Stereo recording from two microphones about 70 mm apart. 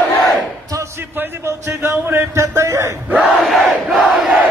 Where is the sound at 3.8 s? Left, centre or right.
Centre.